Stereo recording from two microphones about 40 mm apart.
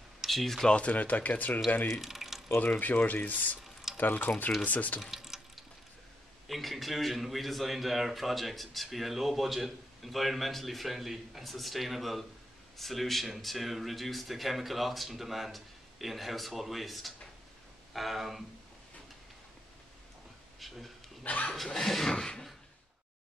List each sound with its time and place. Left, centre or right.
0.3 s speech: centre
0.7 s speech: left
2.0 s a sound: centre
2.6 s speech: left
5.0 s water: centre
6.4 s a man's voice: centre
20.5 s speech: centre
21.2 s speech: left
21.7 s a sound: centre
22.1 s a sound: left